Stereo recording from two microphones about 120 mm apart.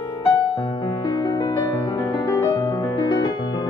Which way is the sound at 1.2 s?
35° left (ahead or behind).